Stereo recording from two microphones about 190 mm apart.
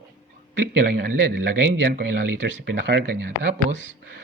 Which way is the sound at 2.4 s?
60° right (ahead or behind).